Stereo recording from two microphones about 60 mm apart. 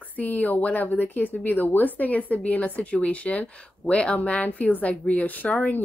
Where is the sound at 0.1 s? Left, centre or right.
Left.